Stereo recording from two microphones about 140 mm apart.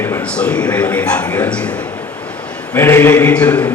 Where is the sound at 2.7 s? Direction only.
15° left (ahead or behind).